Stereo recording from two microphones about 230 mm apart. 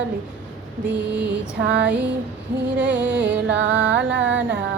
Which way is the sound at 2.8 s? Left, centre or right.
Centre.